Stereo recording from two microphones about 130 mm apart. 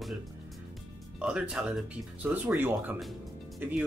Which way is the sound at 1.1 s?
5° right (ahead or behind).